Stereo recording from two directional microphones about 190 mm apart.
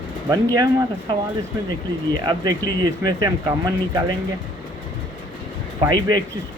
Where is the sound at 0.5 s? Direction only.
20° right (ahead or behind).